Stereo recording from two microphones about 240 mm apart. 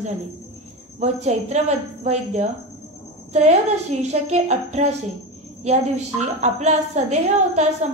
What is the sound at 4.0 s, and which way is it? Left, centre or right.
Speech, right.